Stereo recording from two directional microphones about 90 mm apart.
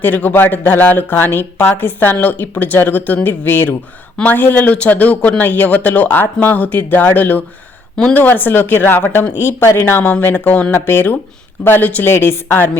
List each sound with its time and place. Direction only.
0.0 s speech: 20° left (ahead or behind)